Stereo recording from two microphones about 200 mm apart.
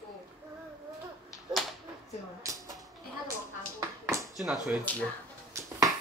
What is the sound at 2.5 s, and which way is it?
Typewriter, 15° right (ahead or behind).